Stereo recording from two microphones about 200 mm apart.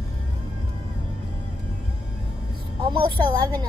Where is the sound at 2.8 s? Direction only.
25° right (ahead or behind).